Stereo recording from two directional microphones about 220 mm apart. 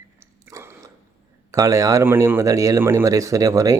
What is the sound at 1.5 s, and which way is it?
Speech, 15° right (ahead or behind).